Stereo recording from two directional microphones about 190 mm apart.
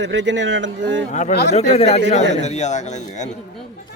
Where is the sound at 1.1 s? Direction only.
40° left (ahead or behind).